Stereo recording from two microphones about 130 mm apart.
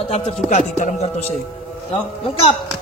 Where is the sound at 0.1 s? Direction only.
55° left (ahead or behind).